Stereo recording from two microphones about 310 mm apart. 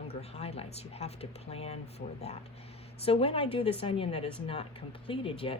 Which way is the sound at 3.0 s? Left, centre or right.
Centre.